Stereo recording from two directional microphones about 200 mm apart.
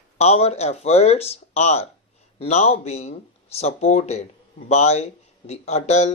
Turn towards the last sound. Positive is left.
turn(degrees=35)  # may be behind; listen again after turning